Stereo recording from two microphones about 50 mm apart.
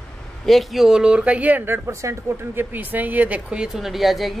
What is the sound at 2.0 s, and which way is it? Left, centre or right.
Speech, right.